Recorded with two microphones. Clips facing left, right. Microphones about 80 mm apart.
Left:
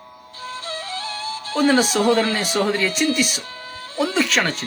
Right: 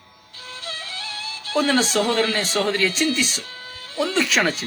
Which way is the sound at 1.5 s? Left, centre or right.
Centre.